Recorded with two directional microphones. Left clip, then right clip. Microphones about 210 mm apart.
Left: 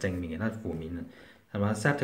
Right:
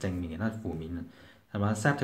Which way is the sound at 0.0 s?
5° right (ahead or behind).